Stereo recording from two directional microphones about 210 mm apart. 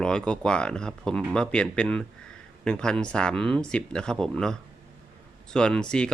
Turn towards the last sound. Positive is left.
turn(degrees=5)  # may be behind; listen again after turning